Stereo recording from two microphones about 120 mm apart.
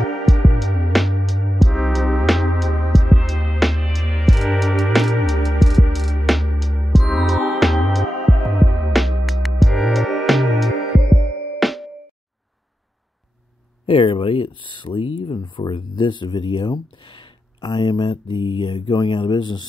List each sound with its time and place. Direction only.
0.0 s music: centre (ahead or behind)
13.8 s speech: 50° left (ahead or behind)